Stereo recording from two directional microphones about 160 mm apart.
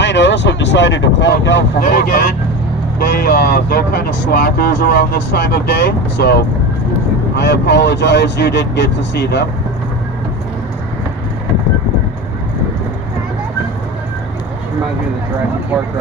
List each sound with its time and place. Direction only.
0.0 s vehicle: 90° left
1.5 s speech: 75° left (ahead or behind)